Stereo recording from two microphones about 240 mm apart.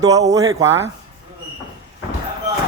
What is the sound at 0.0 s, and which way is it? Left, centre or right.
Speech, centre.